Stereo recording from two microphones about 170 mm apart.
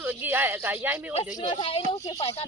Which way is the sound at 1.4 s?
25° left (ahead or behind).